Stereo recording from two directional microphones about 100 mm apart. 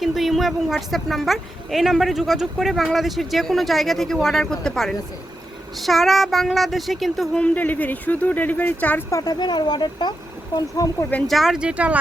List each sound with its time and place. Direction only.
0.0 s a woman's voice: centre (ahead or behind)
7.3 s speech: 15° left (ahead or behind)
9.0 s speech: 35° left (ahead or behind)
11.3 s speech: centre (ahead or behind)